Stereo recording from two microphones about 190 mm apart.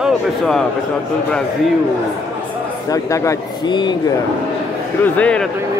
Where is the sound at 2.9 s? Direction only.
15° left (ahead or behind).